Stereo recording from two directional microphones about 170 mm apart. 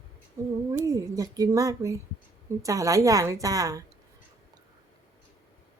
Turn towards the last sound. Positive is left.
turn(degrees=-20)  # may be behind; listen again after turning